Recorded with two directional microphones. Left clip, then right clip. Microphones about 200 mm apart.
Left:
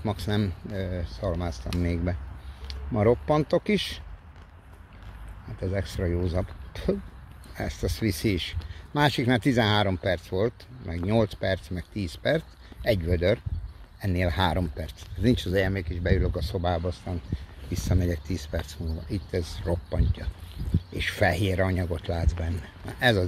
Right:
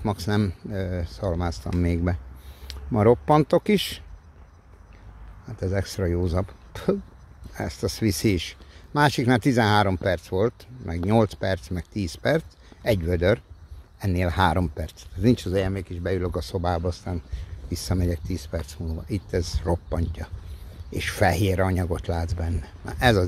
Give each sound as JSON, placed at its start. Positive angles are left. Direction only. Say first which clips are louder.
{"t": 0.0, "sound": "speech", "louder": "right 3 dB", "side_deg": -40}
{"t": 5.6, "sound": "speech", "louder": "right 3 dB", "side_deg": -40}
{"t": 7.5, "sound": "speech", "louder": "right 3 dB", "side_deg": -35}
{"t": 19.0, "sound": "speech", "louder": "right 4 dB", "side_deg": -40}